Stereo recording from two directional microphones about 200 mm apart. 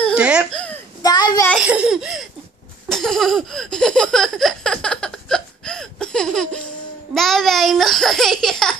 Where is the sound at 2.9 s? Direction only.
Centre (ahead or behind).